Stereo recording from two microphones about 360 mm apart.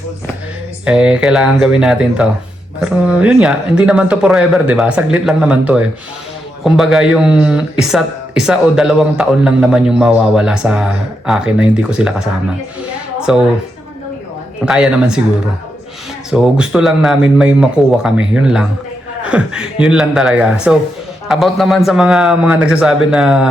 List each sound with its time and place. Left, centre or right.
0.9 s speech: centre
13.1 s a sound: centre
14.6 s speech: centre
16.3 s speech: centre